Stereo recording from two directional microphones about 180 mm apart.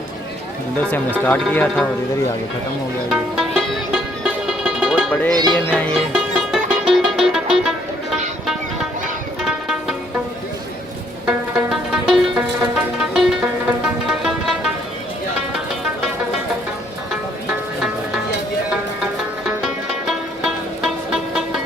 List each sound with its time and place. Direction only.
1.2 s speech: 10° left (ahead or behind)
3.1 s music: centre (ahead or behind)
5.3 s music: 20° right (ahead or behind)
5.6 s speech: 10° left (ahead or behind)
6.1 s music: centre (ahead or behind)
9.4 s music: 5° right (ahead or behind)
11.3 s music: 5° right (ahead or behind)
19.5 s music: centre (ahead or behind)